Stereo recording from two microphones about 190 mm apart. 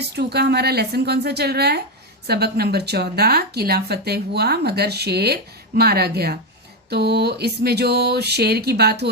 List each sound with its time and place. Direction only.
0.1 s speech: 60° right (ahead or behind)